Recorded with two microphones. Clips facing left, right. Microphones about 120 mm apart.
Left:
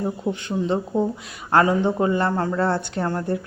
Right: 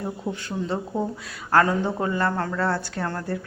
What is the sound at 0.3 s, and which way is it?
Speech, 20° left (ahead or behind).